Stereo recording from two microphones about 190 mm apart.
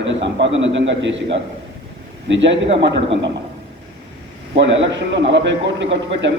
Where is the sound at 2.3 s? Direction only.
70° right (ahead or behind).